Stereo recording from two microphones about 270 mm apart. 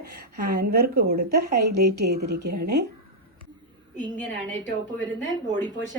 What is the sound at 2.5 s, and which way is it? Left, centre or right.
Speech, right.